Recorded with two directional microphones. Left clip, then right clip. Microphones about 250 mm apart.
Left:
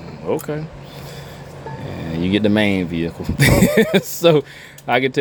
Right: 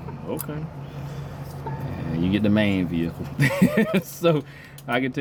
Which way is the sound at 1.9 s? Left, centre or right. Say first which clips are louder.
Left 6 dB; left.